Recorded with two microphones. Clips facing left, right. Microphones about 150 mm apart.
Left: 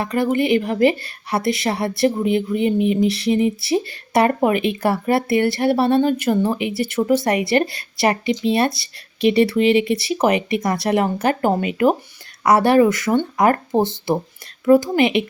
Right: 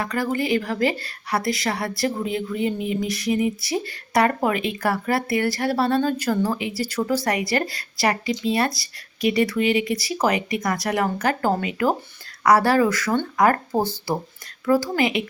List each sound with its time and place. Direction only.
0.0 s speech: 25° left (ahead or behind)